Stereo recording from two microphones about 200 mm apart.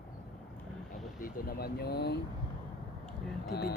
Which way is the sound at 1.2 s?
45° left (ahead or behind).